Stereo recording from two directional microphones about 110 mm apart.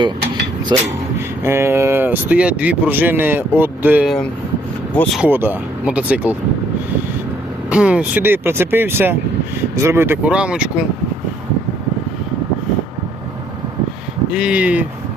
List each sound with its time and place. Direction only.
0.7 s speech: 40° right (ahead or behind)
1.5 s speech: 25° right (ahead or behind)
5.2 s speech: 15° right (ahead or behind)
7.7 s speech: 10° right (ahead or behind)
10.2 s speech: 10° right (ahead or behind)
14.3 s speech: 10° right (ahead or behind)